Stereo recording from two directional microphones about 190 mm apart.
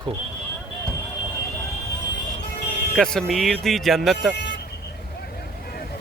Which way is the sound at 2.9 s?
Centre (ahead or behind).